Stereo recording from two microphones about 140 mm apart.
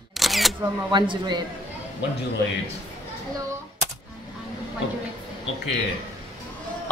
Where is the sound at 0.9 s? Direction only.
35° right (ahead or behind).